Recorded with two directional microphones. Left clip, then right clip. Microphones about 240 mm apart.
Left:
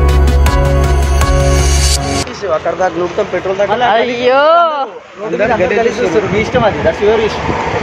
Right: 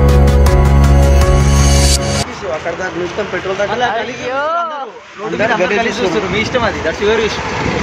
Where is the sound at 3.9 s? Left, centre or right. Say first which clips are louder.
Left 8 dB; left.